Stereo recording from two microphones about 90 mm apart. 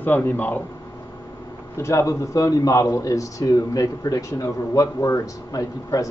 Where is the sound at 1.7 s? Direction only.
30° left (ahead or behind).